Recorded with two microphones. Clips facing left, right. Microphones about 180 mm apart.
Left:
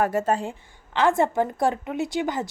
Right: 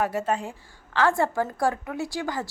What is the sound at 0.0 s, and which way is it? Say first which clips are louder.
Speech: left 3 dB; 45° left (ahead or behind).